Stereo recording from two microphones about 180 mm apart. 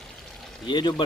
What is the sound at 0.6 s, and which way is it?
Speech, 25° left (ahead or behind).